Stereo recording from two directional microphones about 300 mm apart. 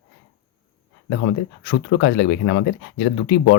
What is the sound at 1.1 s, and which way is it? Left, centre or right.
Speech, left.